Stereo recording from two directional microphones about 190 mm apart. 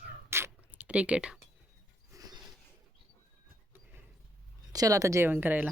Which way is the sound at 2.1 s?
20° right (ahead or behind).